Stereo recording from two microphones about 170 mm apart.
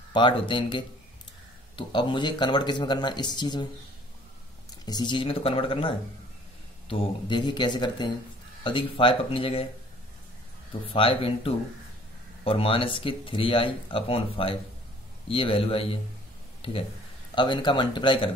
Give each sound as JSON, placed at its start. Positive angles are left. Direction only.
{"t": 0.1, "sound": "speech", "side_deg": 30}
{"t": 4.8, "sound": "speech", "side_deg": 25}
{"t": 10.7, "sound": "speech", "side_deg": 30}
{"t": 17.4, "sound": "speech", "side_deg": 30}